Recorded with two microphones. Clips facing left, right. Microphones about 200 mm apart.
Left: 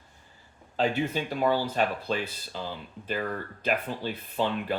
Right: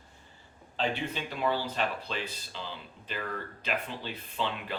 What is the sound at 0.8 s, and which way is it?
Speech, 45° left (ahead or behind).